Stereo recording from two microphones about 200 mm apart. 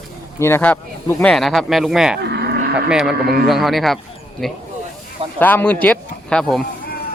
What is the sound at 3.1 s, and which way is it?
Speech, 50° right (ahead or behind).